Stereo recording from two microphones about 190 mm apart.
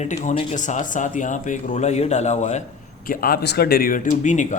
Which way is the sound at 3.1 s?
50° left (ahead or behind).